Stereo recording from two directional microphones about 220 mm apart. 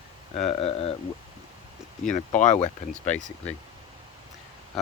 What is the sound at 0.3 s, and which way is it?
Speech, 25° left (ahead or behind).